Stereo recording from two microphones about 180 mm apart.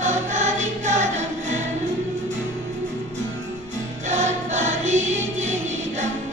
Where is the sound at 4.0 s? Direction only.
40° right (ahead or behind).